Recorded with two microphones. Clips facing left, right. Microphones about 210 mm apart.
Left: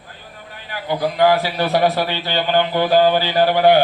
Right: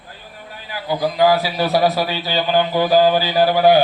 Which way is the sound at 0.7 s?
10° right (ahead or behind).